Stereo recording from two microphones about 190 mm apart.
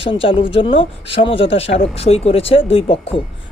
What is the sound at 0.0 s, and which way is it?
Speech, 25° left (ahead or behind).